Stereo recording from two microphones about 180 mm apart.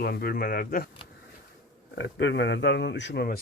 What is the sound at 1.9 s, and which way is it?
A man's voice, 90° left.